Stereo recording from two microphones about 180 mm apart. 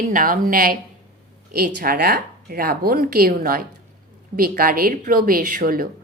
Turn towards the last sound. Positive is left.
turn(degrees=-55)  # may be behind; listen again after turning